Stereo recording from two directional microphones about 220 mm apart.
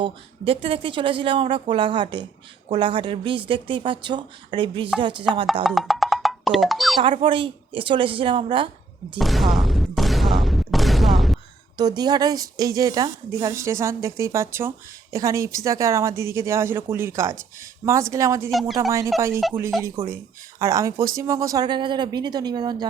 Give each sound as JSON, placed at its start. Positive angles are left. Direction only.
{"t": 0.0, "sound": "speech", "side_deg": -25}
{"t": 5.6, "sound": "speech", "side_deg": 0}
{"t": 7.0, "sound": "speech", "side_deg": -20}
{"t": 9.1, "sound": "a sound", "side_deg": 0}
{"t": 11.8, "sound": "speech", "side_deg": -20}
{"t": 19.3, "sound": "speech", "side_deg": 0}
{"t": 20.0, "sound": "speech", "side_deg": -30}
{"t": 20.6, "sound": "speech", "side_deg": -15}